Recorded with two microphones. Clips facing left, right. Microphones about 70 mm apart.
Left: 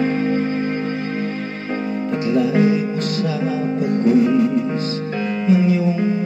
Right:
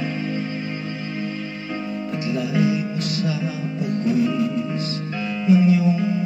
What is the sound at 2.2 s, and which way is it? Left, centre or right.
Music, left.